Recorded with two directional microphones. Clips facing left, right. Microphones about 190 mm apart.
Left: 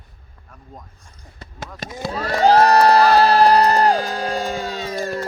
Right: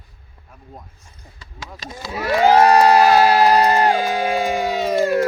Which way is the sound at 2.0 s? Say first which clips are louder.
Left 3 dB; 55° left (ahead or behind).